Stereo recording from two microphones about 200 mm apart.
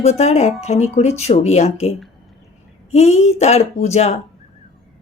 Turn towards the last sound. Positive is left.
turn(degrees=35)  # may be behind; listen again after turning